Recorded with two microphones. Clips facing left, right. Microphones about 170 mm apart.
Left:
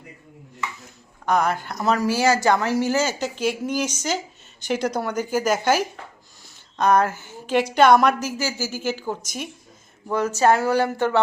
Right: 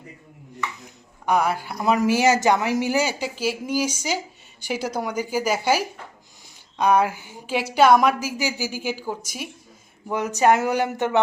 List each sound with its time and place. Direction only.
1.2 s a woman's voice: 10° right (ahead or behind)